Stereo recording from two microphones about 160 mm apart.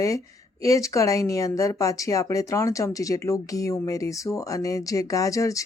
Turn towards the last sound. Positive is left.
turn(degrees=20)  # may be behind; listen again after turning